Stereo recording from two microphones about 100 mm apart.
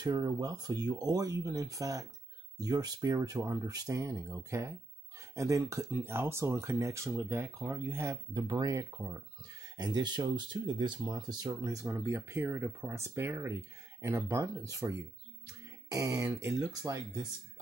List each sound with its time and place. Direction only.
0.0 s speech: 40° right (ahead or behind)
8.4 s speech: 40° right (ahead or behind)
9.8 s speech: 45° right (ahead or behind)